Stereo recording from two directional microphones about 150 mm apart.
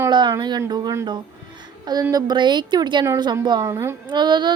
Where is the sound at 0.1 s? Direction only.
30° right (ahead or behind).